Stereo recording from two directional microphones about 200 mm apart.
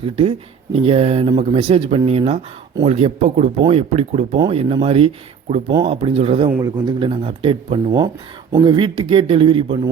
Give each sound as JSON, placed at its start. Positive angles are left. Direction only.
{"t": 0.0, "sound": "speech", "side_deg": -25}